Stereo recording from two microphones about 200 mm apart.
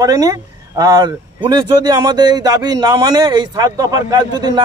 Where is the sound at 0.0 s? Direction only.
15° right (ahead or behind).